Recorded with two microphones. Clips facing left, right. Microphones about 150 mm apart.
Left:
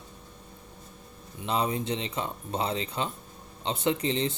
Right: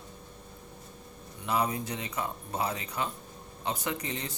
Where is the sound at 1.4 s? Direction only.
25° left (ahead or behind).